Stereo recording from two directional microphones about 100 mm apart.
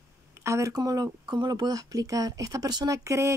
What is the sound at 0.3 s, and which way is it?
Speech, 30° right (ahead or behind).